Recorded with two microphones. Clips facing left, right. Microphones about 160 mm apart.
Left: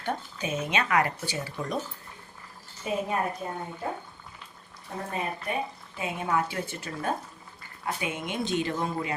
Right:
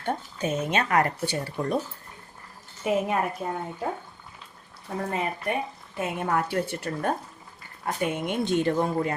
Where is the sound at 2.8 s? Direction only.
70° right (ahead or behind).